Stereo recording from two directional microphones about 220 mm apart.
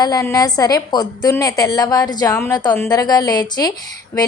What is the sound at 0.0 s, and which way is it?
A woman's voice, 15° left (ahead or behind).